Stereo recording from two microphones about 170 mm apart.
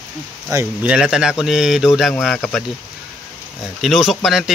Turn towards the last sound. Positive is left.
turn(degrees=0)  # may be behind; listen again after turning